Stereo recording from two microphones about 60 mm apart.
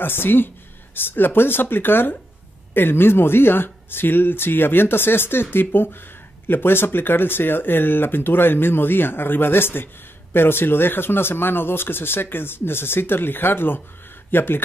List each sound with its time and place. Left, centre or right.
0.0 s speech: left